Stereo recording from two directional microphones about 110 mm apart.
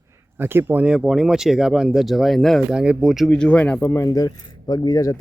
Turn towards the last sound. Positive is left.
turn(degrees=35)  # may be behind; listen again after turning